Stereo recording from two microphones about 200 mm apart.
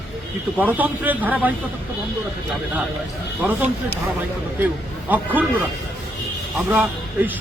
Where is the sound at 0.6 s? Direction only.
10° right (ahead or behind).